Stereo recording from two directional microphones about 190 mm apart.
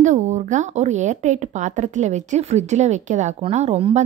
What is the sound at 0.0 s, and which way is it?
Speech, 40° right (ahead or behind).